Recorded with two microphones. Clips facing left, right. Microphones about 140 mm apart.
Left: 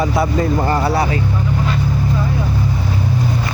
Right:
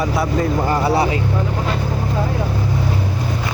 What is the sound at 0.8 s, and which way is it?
Speech, 20° right (ahead or behind).